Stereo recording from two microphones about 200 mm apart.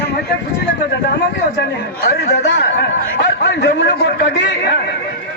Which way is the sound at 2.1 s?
55° left (ahead or behind).